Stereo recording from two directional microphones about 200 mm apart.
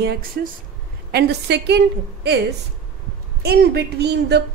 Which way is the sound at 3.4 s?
55° right (ahead or behind).